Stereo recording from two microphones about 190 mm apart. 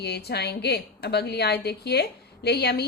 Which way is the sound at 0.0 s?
60° left (ahead or behind).